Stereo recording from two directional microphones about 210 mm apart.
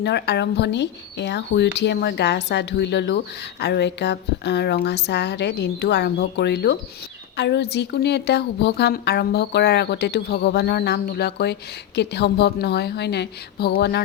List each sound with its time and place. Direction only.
0.0 s a woman's voice: 55° left (ahead or behind)